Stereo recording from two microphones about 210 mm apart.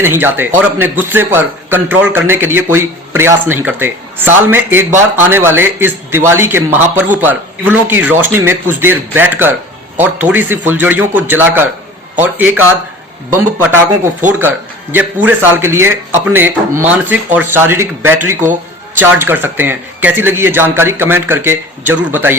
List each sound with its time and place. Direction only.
0.0 s a man's voice: 10° right (ahead or behind)